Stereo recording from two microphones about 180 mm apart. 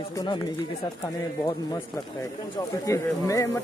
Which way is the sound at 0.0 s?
25° left (ahead or behind).